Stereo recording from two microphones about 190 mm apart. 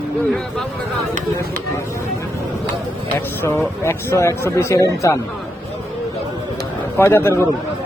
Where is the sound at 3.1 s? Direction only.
10° left (ahead or behind).